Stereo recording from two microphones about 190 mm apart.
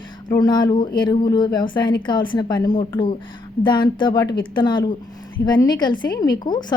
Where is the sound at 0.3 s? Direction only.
20° left (ahead or behind).